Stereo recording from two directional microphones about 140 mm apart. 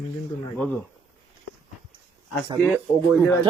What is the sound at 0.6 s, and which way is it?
Speech, 10° left (ahead or behind).